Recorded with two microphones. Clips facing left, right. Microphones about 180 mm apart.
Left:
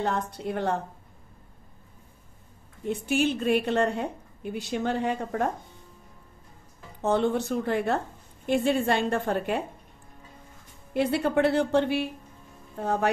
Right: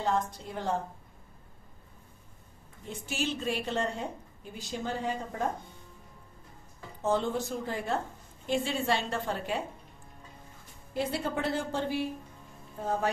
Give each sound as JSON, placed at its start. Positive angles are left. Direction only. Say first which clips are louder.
{"t": 0.0, "sound": "a woman's voice", "louder": "left 2 dB", "side_deg": 65}
{"t": 2.9, "sound": "a woman's voice", "louder": "left 9 dB", "side_deg": 60}
{"t": 7.0, "sound": "a woman's voice", "louder": "left 5 dB", "side_deg": 65}
{"t": 10.9, "sound": "a woman's voice", "louder": "left 7 dB", "side_deg": 65}